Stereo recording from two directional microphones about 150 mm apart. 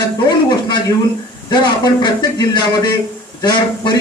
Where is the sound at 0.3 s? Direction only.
30° left (ahead or behind).